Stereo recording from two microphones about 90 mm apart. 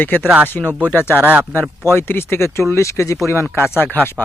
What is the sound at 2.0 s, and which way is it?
Speech, 25° left (ahead or behind).